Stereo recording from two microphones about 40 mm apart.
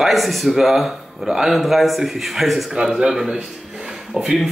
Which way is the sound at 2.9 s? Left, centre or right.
Centre.